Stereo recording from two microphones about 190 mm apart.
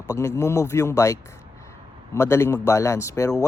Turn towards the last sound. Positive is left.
turn(degrees=15)  # may be behind; listen again after turning